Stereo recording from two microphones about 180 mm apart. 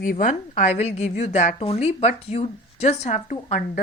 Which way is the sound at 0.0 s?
50° left (ahead or behind).